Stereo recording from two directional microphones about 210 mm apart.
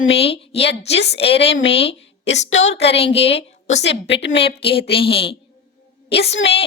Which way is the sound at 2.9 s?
30° left (ahead or behind).